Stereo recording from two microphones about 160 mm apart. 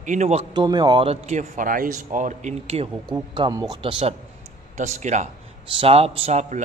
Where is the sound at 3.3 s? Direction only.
25° right (ahead or behind).